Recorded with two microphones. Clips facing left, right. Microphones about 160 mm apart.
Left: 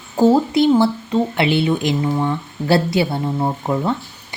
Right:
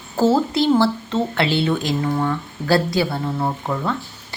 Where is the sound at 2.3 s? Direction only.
25° left (ahead or behind).